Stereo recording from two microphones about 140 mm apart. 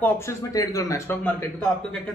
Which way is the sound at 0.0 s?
20° left (ahead or behind).